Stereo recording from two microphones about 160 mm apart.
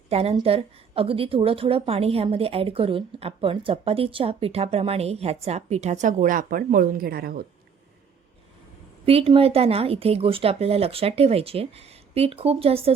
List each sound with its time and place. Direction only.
0.1 s a woman's voice: 40° right (ahead or behind); by 7.4 s 70° right (ahead or behind)
9.0 s a woman's voice: 35° right (ahead or behind)